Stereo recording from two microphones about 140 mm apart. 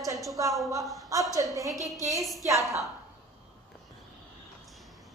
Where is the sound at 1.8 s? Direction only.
Centre (ahead or behind).